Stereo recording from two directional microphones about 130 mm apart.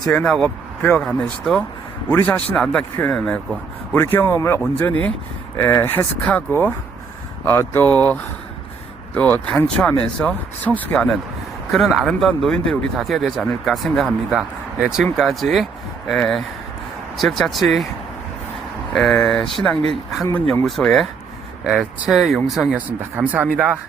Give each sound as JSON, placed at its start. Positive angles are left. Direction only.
{"t": 0.1, "sound": "speech", "side_deg": 5}
{"t": 2.0, "sound": "speech", "side_deg": 15}
{"t": 7.9, "sound": "speech", "side_deg": -30}
{"t": 9.1, "sound": "speech", "side_deg": 10}
{"t": 18.9, "sound": "speech", "side_deg": 5}
{"t": 22.9, "sound": "speech", "side_deg": -15}